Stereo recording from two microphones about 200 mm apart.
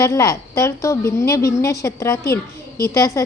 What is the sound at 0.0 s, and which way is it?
A woman's voice, 15° left (ahead or behind).